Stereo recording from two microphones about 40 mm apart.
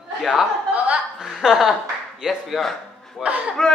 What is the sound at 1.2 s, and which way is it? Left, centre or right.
A woman's voice, centre.